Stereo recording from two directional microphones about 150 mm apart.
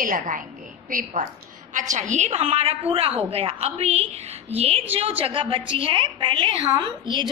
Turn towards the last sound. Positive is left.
turn(degrees=-30)  # may be behind; listen again after turning